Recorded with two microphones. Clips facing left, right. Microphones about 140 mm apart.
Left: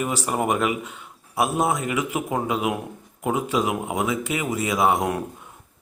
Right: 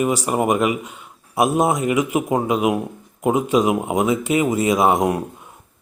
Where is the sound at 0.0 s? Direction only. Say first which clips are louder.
Right 5 dB; 15° right (ahead or behind).